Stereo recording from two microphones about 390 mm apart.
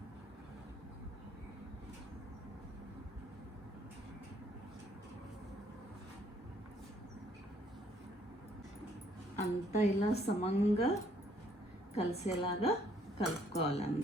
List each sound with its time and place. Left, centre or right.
9.4 s a woman's voice: centre
11.9 s a woman's voice: centre